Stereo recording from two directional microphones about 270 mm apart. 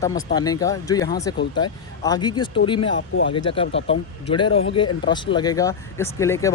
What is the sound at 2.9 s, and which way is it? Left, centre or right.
Speech, left.